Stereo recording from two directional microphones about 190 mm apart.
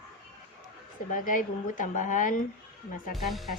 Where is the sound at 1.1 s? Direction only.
45° left (ahead or behind).